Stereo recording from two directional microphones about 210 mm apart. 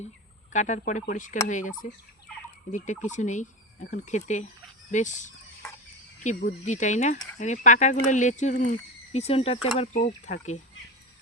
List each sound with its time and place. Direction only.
0.5 s speech: 35° left (ahead or behind)